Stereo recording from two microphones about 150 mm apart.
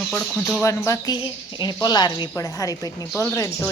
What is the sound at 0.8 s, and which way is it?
Speech, 25° left (ahead or behind).